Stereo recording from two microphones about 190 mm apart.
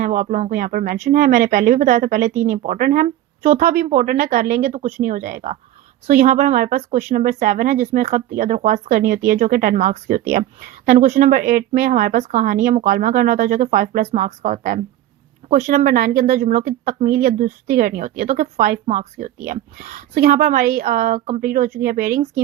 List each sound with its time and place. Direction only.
0.0 s speech: 45° right (ahead or behind)